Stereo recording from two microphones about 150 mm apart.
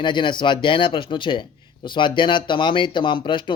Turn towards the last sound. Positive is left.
turn(degrees=30)  # may be behind; listen again after turning